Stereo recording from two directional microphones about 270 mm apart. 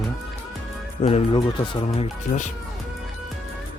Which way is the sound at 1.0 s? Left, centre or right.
Left.